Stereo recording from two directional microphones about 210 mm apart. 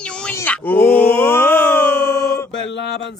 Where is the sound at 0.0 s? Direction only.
5° left (ahead or behind).